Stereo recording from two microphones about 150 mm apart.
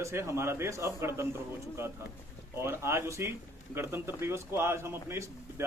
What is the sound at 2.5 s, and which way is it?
A man's voice, 15° right (ahead or behind).